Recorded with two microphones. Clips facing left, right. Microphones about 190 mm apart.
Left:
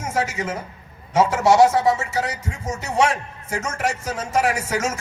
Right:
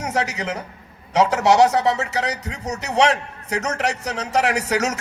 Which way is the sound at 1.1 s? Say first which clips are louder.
Even; 70° right (ahead or behind).